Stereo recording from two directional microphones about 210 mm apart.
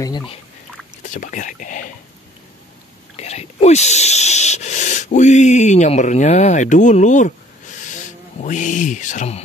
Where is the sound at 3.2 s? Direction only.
30° left (ahead or behind).